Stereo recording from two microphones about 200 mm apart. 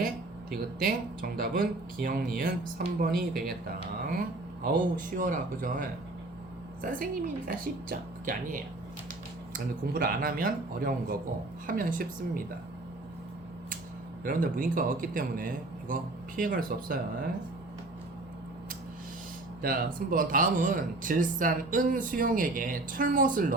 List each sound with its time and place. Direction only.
0.5 s speech: 45° right (ahead or behind)
6.8 s speech: 45° right (ahead or behind)
14.3 s speech: 40° right (ahead or behind)
19.6 s speech: 45° right (ahead or behind)